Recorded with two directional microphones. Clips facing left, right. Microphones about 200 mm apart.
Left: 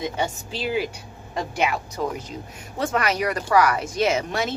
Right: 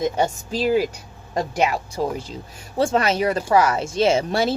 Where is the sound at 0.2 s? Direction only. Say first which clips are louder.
Right 5 dB; 40° right (ahead or behind).